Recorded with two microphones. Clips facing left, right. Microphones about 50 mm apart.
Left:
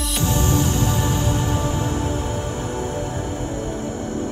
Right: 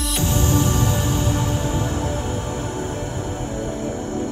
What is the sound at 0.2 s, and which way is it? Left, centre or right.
Music, left.